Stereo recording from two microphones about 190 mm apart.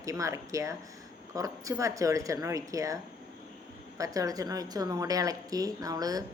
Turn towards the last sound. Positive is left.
turn(degrees=-20)  # may be behind; listen again after turning